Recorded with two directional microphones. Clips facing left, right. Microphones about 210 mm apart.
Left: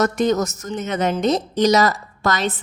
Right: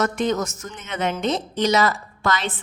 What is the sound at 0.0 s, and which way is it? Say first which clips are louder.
A woman's voice: left 4 dB; 40° left (ahead or behind).